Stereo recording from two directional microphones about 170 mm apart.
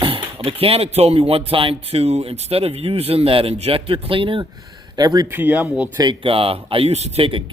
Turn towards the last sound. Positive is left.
turn(degrees=-35)  # may be behind; listen again after turning